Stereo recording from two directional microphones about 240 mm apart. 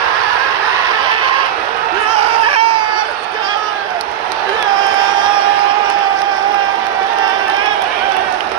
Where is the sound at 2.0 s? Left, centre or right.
Right.